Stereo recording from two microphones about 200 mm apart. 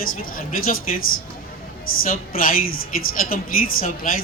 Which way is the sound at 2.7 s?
90° left.